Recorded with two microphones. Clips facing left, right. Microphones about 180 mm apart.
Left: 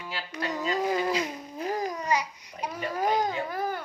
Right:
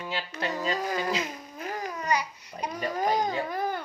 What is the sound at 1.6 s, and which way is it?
Speech, 35° left (ahead or behind).